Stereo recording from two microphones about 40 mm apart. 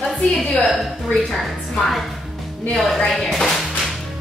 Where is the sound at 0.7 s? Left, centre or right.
Centre.